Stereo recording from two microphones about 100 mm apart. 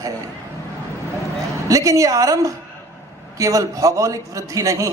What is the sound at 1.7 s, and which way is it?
A man's voice, 35° right (ahead or behind).